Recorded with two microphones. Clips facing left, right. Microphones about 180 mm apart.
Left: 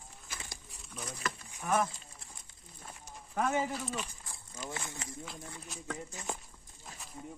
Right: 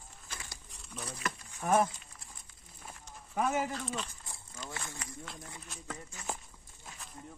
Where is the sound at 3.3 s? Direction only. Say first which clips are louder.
Even; 5° right (ahead or behind).